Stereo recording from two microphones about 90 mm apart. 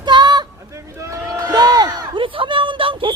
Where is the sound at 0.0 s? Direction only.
55° right (ahead or behind).